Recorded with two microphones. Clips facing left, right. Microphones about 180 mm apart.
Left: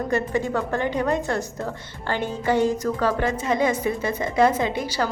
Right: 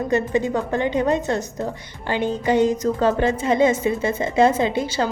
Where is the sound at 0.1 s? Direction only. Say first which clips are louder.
Right 4 dB; 20° right (ahead or behind).